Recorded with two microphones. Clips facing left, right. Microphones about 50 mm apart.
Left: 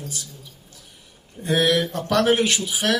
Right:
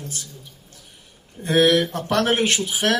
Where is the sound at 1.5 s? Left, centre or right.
Right.